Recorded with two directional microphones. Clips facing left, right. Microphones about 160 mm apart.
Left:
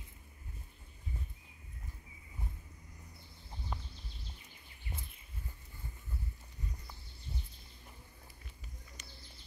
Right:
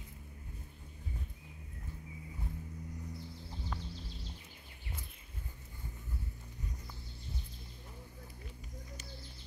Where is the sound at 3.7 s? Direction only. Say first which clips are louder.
Even; 15° left (ahead or behind).